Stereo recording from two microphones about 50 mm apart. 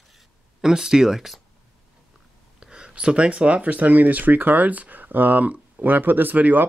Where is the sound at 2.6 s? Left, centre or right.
Centre.